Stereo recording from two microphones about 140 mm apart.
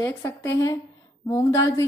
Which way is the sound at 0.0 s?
20° left (ahead or behind).